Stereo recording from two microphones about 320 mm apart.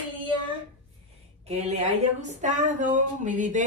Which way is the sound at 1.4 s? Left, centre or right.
Right.